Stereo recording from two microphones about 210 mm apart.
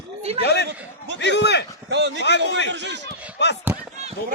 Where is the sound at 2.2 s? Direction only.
55° left (ahead or behind).